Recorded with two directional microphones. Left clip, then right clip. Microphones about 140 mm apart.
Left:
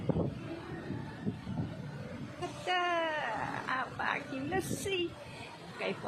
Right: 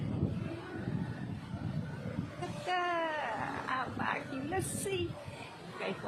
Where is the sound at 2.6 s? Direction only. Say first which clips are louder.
Left 2 dB; 15° left (ahead or behind).